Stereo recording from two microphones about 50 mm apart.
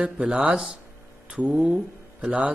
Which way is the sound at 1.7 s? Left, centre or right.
Right.